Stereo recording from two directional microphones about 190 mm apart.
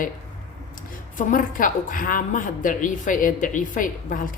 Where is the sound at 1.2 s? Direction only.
45° left (ahead or behind).